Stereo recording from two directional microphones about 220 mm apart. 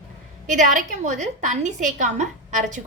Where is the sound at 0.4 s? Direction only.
35° right (ahead or behind).